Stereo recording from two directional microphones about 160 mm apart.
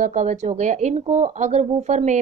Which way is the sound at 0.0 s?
50° right (ahead or behind).